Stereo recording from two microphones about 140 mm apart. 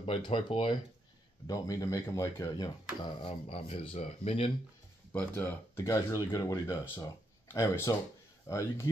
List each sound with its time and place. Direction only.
0.0 s speech: 40° left (ahead or behind)
1.5 s speech: 25° left (ahead or behind)
3.0 s speech: 40° left (ahead or behind)
5.1 s speech: 15° left (ahead or behind)